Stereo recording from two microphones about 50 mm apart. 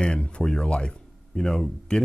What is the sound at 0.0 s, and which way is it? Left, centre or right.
Speech, left.